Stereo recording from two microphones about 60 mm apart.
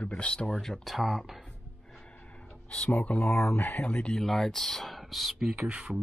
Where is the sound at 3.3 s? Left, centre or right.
Left.